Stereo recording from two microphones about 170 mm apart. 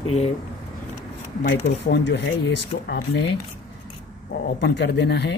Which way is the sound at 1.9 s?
90° left.